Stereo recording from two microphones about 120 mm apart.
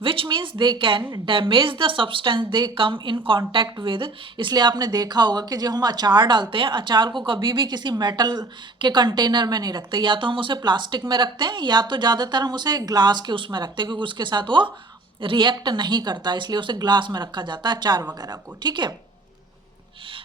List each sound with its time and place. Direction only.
0.0 s a woman's voice: 45° right (ahead or behind)